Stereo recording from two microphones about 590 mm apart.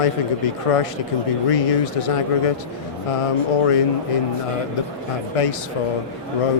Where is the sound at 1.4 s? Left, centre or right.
Left.